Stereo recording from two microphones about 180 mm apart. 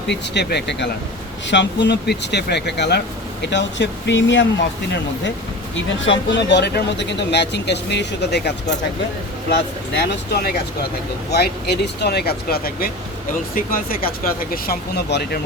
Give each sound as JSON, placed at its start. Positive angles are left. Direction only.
{"t": 0.1, "sound": "speech", "side_deg": 70}
{"t": 3.4, "sound": "speech", "side_deg": 80}
{"t": 5.7, "sound": "speech", "side_deg": 85}
{"t": 9.9, "sound": "speech", "side_deg": 65}
{"t": 13.9, "sound": "speech", "side_deg": 55}